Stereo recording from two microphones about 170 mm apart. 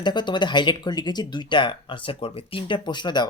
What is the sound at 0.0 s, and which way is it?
Speech, 25° left (ahead or behind).